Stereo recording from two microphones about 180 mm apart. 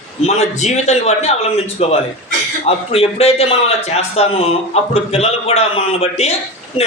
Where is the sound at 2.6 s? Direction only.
35° left (ahead or behind).